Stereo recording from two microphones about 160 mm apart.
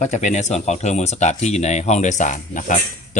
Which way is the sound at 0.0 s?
50° left (ahead or behind).